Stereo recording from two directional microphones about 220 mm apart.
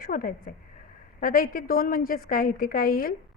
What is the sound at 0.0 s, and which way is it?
A woman's voice, 40° left (ahead or behind).